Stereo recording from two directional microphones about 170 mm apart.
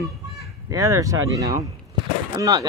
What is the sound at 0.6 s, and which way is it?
Speech, 20° right (ahead or behind).